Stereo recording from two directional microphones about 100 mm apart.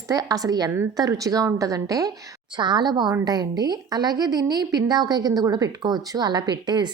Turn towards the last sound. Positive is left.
turn(degrees=-45)  # may be behind; listen again after turning